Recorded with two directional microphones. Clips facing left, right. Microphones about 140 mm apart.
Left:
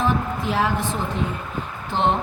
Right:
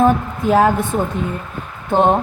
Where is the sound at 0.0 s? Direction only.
50° right (ahead or behind).